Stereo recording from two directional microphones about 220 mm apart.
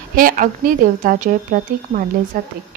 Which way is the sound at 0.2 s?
40° right (ahead or behind).